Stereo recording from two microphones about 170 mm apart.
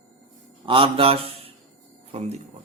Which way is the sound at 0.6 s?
30° right (ahead or behind).